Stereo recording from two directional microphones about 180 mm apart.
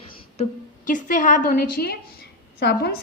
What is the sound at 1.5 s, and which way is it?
A woman's voice, 55° left (ahead or behind).